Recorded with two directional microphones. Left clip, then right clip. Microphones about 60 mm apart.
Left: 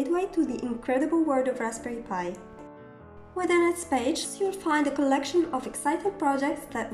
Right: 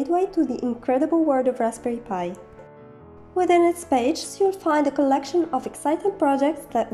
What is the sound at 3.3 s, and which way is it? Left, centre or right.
A woman's voice, right.